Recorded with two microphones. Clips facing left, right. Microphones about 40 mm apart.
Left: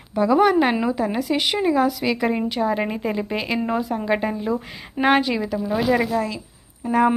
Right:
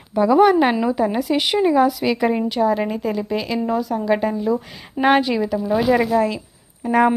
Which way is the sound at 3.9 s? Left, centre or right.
Centre.